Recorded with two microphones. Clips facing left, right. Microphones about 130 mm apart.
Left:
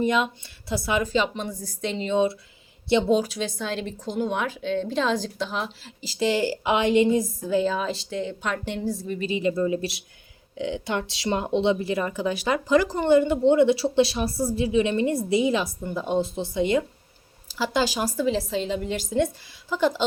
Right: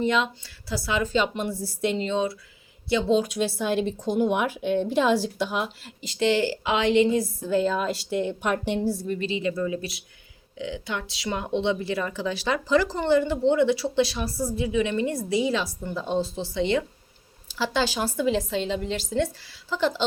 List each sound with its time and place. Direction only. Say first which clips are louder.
0.0 s speech: left 1 dB; 15° left (ahead or behind)
1.4 s speech: right 4 dB; 5° right (ahead or behind)
3.1 s speech: even; 5° left (ahead or behind)
6.2 s speech: even; 10° left (ahead or behind)
7.5 s a woman's voice: even; centre (ahead or behind)
8.1 s speech: right 3 dB; 15° right (ahead or behind)
8.8 s a woman's voice: right 2 dB; centre (ahead or behind)
9.4 s a woman's voice: left 3 dB; 25° left (ahead or behind)
10.8 s speech: left 4 dB; 35° left (ahead or behind)
11.3 s a woman's voice: left 3 dB; 25° left (ahead or behind)